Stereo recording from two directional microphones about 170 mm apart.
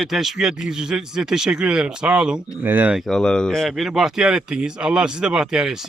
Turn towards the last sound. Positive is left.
turn(degrees=-5)  # may be behind; listen again after turning